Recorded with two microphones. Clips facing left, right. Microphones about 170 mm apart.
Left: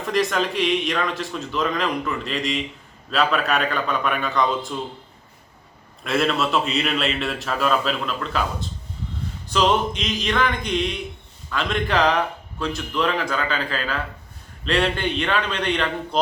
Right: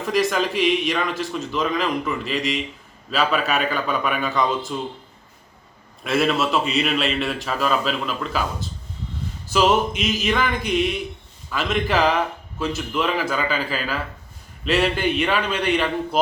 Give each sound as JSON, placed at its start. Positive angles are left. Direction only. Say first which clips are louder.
{"t": 0.0, "sound": "speech", "louder": "right 1 dB", "side_deg": 0}
{"t": 6.0, "sound": "speech", "louder": "right 1 dB", "side_deg": -5}
{"t": 9.5, "sound": "a man's voice", "louder": "right 2 dB", "side_deg": -5}